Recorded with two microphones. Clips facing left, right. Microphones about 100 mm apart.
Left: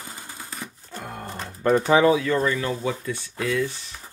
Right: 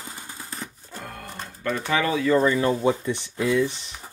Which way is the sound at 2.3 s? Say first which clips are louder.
Right 4 dB; 25° right (ahead or behind).